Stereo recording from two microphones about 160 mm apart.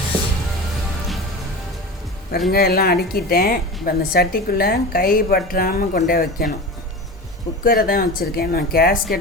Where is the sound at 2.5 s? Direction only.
75° left (ahead or behind).